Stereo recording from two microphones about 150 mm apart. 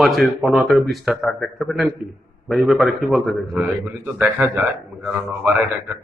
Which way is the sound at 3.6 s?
15° right (ahead or behind).